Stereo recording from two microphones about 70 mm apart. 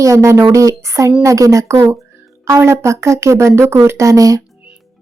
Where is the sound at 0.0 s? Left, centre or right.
Right.